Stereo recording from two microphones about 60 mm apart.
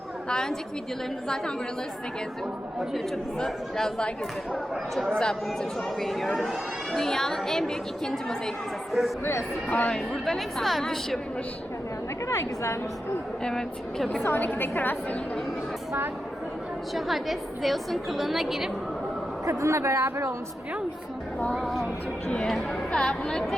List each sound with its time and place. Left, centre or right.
0.3 s speech: centre
3.3 s speech: centre
5.1 s a woman's voice: centre
9.6 s a woman's voice: left
9.9 s a woman's voice: centre
12.3 s a woman's voice: left
13.4 s speech: centre
14.3 s a woman's voice: left
16.9 s a woman's voice: centre
19.5 s speech: right
21.5 s a woman's voice: centre
22.9 s speech: centre